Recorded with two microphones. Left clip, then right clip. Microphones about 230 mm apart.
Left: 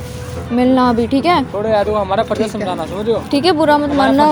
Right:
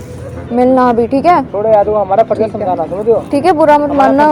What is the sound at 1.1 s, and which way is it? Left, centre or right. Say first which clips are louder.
Speech: right 4 dB; left.